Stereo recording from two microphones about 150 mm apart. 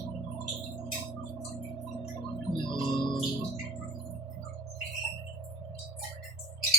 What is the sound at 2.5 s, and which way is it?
Organ, 30° left (ahead or behind).